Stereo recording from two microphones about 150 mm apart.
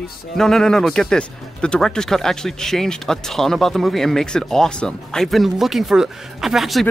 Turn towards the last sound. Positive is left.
turn(degrees=0)  # may be behind; listen again after turning